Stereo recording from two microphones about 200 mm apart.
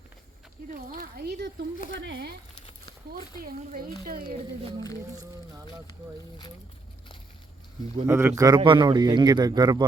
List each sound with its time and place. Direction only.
0.7 s speech: 45° right (ahead or behind)
3.4 s speech: 45° right (ahead or behind)
8.0 s speech: 15° right (ahead or behind)